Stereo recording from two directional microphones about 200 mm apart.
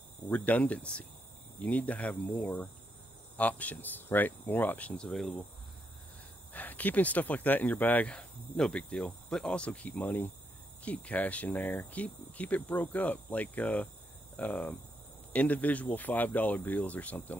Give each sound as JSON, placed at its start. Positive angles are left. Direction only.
{"t": 0.3, "sound": "speech", "side_deg": 5}
{"t": 6.5, "sound": "speech", "side_deg": 10}